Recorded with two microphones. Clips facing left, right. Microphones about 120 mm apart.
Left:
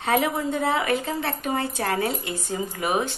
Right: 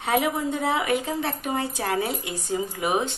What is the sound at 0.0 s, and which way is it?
A woman's voice, 15° right (ahead or behind).